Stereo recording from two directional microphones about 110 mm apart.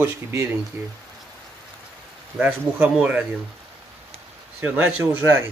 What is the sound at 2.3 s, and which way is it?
Speech, 15° right (ahead or behind).